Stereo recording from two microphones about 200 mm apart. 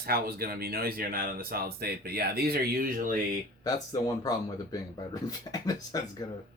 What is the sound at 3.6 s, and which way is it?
Speech, 20° left (ahead or behind).